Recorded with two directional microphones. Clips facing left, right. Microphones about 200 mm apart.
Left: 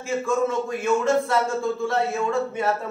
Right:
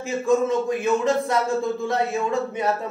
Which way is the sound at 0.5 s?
15° right (ahead or behind).